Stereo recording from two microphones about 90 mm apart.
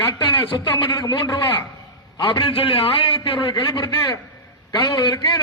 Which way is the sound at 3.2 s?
65° left (ahead or behind).